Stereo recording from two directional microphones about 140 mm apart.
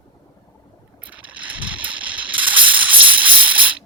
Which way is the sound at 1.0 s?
10° right (ahead or behind).